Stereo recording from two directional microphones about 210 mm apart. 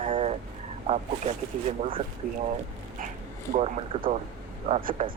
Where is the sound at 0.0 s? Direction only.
25° right (ahead or behind).